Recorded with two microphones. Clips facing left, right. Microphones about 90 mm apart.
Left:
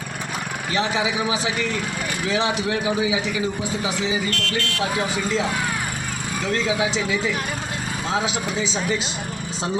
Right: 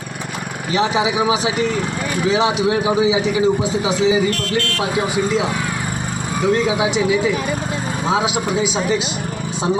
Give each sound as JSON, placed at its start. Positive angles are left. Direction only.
{"t": 0.7, "sound": "speech", "side_deg": -20}
{"t": 6.5, "sound": "speech", "side_deg": -15}
{"t": 8.1, "sound": "speech", "side_deg": -15}